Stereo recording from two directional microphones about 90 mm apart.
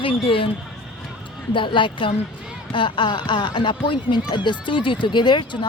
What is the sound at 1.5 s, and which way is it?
Speech, 65° left (ahead or behind).